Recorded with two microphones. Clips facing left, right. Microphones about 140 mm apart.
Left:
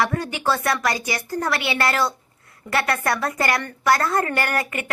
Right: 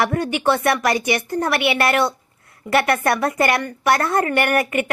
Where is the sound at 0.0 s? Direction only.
25° right (ahead or behind).